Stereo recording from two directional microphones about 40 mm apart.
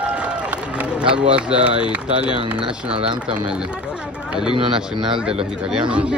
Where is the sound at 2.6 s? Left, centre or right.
Right.